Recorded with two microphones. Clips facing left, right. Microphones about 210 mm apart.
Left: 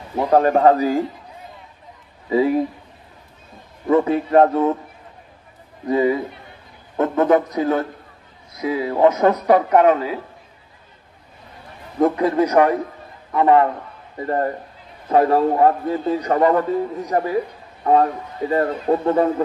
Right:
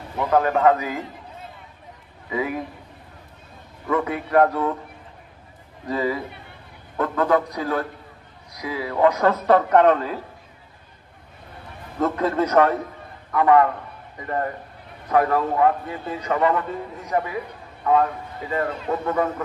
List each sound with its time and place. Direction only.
0.2 s a man's voice: 35° left (ahead or behind)
2.2 s a man's voice: 30° left (ahead or behind)
3.8 s a man's voice: 25° left (ahead or behind)
5.9 s a man's voice: 20° left (ahead or behind)
12.0 s a man's voice: 15° left (ahead or behind)
13.3 s a man's voice: 25° left (ahead or behind)